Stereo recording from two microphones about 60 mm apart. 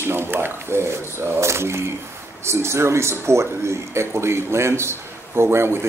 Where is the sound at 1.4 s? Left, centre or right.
Right.